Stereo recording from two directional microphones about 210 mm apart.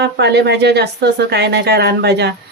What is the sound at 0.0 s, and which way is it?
Speech, 50° right (ahead or behind).